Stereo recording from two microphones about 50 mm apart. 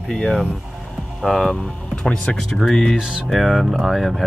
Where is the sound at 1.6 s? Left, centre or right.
Left.